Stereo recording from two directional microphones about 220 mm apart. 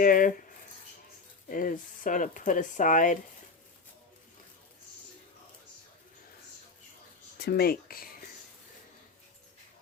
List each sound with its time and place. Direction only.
0.0 s speech: 40° left (ahead or behind)
1.5 s speech: 35° left (ahead or behind)
7.3 s speech: 45° left (ahead or behind)